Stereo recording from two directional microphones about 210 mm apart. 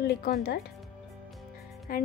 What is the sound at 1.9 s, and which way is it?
Speech, 40° left (ahead or behind).